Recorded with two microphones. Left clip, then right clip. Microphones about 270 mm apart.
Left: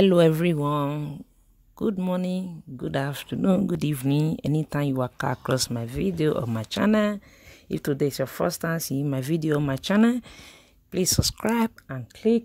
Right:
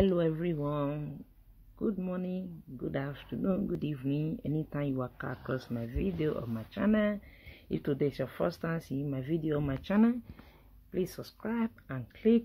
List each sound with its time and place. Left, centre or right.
0.0 s speech: left